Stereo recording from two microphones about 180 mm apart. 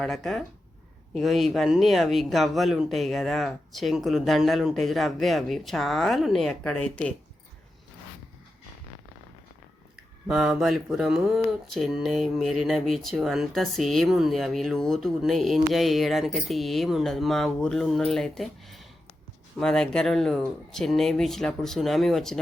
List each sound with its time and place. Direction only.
0.0 s speech: centre (ahead or behind)
10.2 s speech: centre (ahead or behind)